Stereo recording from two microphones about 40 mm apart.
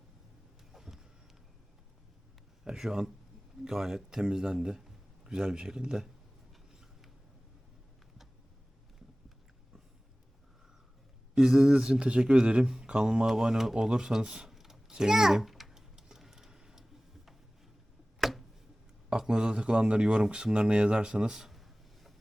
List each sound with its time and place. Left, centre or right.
0.7 s a sound: centre
2.6 s speech: centre
11.3 s speech: centre
13.2 s speech: centre
14.5 s a sound: centre
14.9 s a child's voice: centre
15.7 s tick-tock: centre
18.2 s tick-tock: centre
19.1 s speech: centre
21.5 s a sound: centre